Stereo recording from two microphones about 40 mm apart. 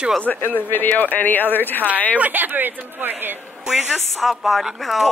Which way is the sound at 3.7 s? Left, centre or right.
Centre.